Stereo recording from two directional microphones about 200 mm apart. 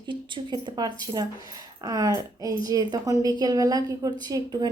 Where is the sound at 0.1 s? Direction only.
25° right (ahead or behind).